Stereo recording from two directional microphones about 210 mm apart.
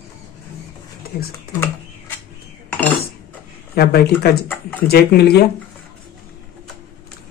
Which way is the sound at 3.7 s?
45° left (ahead or behind).